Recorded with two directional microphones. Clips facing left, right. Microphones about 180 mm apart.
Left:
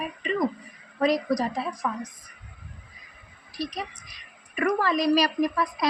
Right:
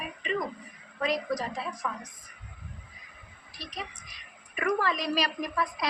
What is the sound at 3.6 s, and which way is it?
A woman's voice, 35° left (ahead or behind).